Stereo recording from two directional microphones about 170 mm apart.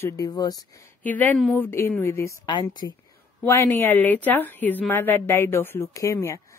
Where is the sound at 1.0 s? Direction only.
10° left (ahead or behind); by 3.0 s 25° left (ahead or behind).